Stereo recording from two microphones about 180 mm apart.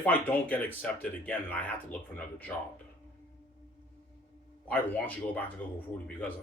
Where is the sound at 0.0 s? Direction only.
10° left (ahead or behind).